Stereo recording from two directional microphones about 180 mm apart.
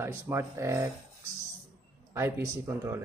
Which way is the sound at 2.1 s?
15° right (ahead or behind).